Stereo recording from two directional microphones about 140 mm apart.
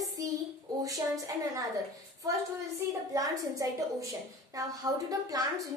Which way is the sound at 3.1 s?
25° right (ahead or behind).